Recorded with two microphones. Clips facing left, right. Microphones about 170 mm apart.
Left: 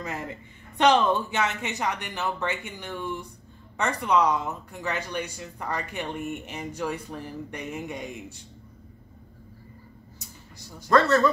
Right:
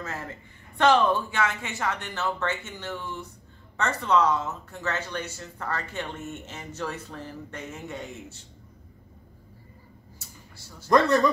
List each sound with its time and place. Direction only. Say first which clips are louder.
0.0 s speech: left 2 dB; 15° left (ahead or behind)
10.1 s a sound: left 2 dB; 15° left (ahead or behind)
10.9 s speech: even; 15° right (ahead or behind)